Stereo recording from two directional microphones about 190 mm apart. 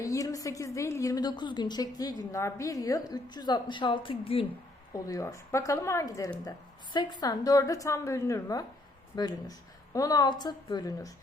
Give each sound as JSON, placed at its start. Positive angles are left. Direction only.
{"t": 0.0, "sound": "a woman's voice", "side_deg": 15}
{"t": 4.9, "sound": "a woman's voice", "side_deg": 15}